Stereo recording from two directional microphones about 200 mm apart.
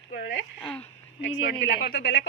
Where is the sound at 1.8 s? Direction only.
60° left (ahead or behind).